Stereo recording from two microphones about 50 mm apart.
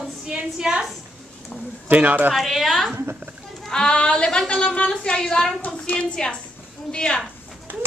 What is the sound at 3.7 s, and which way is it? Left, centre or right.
A woman's voice, centre.